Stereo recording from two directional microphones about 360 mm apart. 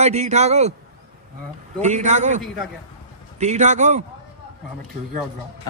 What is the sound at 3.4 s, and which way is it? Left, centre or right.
Speech, centre.